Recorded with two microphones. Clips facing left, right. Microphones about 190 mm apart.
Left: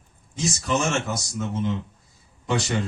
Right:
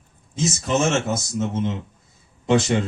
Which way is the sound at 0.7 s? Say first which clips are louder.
Right 4 dB; 25° right (ahead or behind).